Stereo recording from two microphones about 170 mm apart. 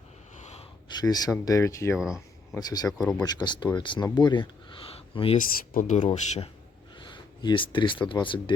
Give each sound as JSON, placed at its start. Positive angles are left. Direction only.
{"t": 0.9, "sound": "a sound", "side_deg": 25}
{"t": 1.5, "sound": "speech", "side_deg": 20}
{"t": 2.0, "sound": "a sound", "side_deg": -5}
{"t": 2.6, "sound": "speech", "side_deg": 25}
{"t": 3.0, "sound": "speech", "side_deg": 5}
{"t": 3.2, "sound": "speech", "side_deg": 25}
{"t": 5.7, "sound": "speech", "side_deg": 45}
{"t": 7.1, "sound": "speech", "side_deg": 30}